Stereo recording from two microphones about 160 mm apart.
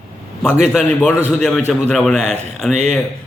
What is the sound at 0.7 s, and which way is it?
Speech, centre (ahead or behind).